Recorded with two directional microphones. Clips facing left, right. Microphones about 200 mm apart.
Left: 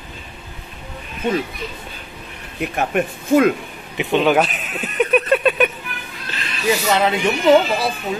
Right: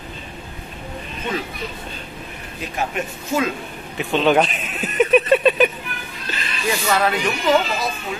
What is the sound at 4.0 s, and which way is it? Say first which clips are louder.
Speech: left 1 dB; 15° left (ahead or behind).